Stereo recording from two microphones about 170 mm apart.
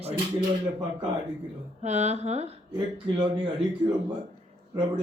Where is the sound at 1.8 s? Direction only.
40° right (ahead or behind).